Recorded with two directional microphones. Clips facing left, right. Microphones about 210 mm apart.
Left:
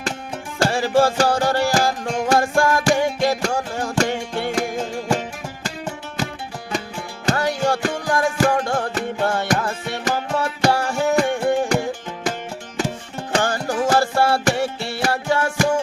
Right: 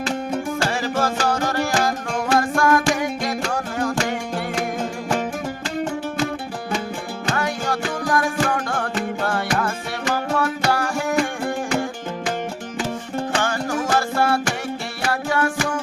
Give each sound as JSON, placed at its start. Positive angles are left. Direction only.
{"t": 0.7, "sound": "music", "side_deg": 30}
{"t": 7.3, "sound": "music", "side_deg": 30}
{"t": 13.3, "sound": "music", "side_deg": 35}